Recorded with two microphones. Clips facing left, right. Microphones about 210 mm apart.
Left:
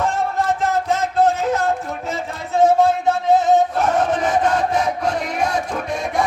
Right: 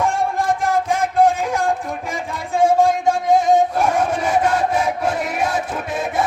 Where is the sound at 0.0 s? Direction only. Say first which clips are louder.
Right 1 dB; 10° right (ahead or behind).